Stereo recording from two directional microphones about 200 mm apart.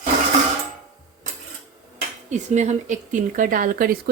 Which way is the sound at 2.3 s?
35° right (ahead or behind).